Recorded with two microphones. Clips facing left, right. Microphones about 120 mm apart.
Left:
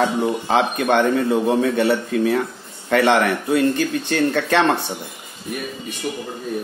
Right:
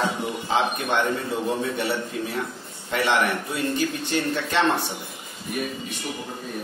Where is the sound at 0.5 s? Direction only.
60° left (ahead or behind).